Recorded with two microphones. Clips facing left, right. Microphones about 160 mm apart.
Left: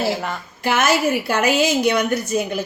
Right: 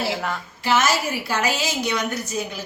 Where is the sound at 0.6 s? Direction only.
55° left (ahead or behind).